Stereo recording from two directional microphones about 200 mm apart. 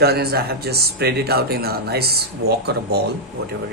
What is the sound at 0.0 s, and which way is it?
Speech, 50° right (ahead or behind).